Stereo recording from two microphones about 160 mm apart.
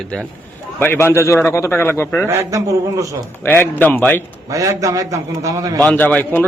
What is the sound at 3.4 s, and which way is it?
Speech, 15° left (ahead or behind).